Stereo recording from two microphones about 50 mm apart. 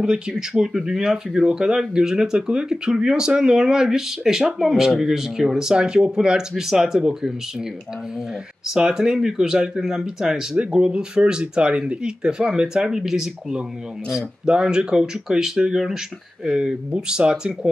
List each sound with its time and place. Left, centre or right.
0.0 s speech: centre
8.6 s speech: centre